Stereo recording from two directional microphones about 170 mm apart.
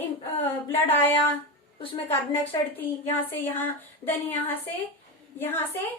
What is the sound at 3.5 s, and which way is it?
Speech, 10° left (ahead or behind).